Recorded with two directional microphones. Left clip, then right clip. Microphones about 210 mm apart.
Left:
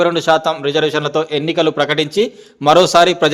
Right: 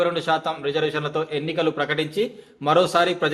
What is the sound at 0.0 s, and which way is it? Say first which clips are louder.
A man's voice: left 8 dB; 45° left (ahead or behind).